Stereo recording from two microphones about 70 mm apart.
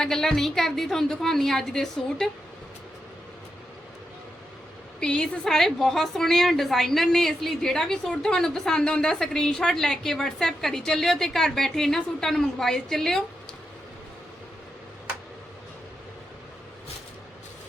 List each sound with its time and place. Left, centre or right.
0.0 s a woman's voice: centre
4.9 s a woman's voice: centre